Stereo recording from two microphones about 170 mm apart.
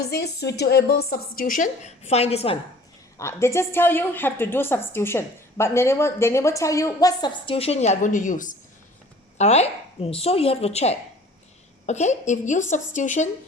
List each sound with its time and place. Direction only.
0.0 s a woman's voice: 70° left (ahead or behind); by 2.6 s 35° left (ahead or behind)
3.2 s a woman's voice: 15° left (ahead or behind); by 8.5 s 50° left (ahead or behind)
9.4 s a woman's voice: 40° left (ahead or behind)